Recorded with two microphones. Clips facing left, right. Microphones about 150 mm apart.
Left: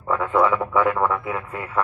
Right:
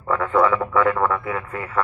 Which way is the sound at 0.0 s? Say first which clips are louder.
Right 1 dB; 10° left (ahead or behind).